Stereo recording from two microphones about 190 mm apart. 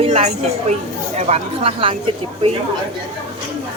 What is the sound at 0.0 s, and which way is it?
Speech, 35° right (ahead or behind).